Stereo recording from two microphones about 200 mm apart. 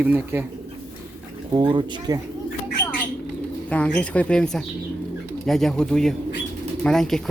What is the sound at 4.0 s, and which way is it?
Speech, 5° left (ahead or behind).